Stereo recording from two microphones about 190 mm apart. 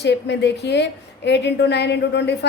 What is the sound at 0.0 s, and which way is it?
A woman's voice, 65° left (ahead or behind).